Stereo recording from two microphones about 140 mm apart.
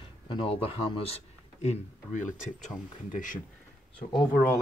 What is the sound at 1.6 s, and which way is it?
Speech, 60° left (ahead or behind).